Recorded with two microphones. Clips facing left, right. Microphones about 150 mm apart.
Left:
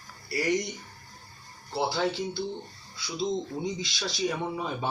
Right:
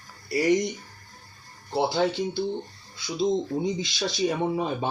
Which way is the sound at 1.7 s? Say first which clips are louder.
Right 4 dB; 20° right (ahead or behind).